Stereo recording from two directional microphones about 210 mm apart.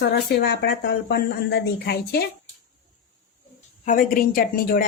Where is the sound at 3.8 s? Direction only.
40° left (ahead or behind).